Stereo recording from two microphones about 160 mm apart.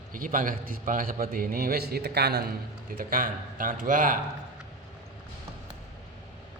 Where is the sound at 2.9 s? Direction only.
65° right (ahead or behind).